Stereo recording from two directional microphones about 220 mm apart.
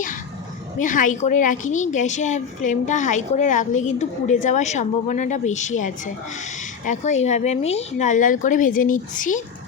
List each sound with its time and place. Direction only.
0.8 s a woman's voice: 35° left (ahead or behind)